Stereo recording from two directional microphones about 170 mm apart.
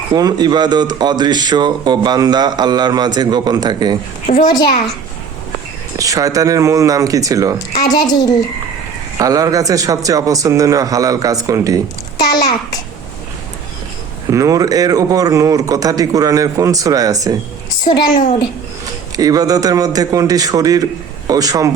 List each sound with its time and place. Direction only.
0.1 s speech: 20° right (ahead or behind)
4.3 s a child's voice: 55° left (ahead or behind)
6.0 s speech: 20° right (ahead or behind)
7.8 s a woman's voice: 20° left (ahead or behind)
9.1 s speech: 20° right (ahead or behind)
12.1 s a child's voice: 20° left (ahead or behind)
14.3 s speech: 20° right (ahead or behind)
19.1 s a man's voice: 20° right (ahead or behind)